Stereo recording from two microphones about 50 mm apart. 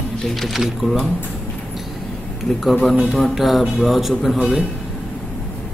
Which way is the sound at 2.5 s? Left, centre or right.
Centre.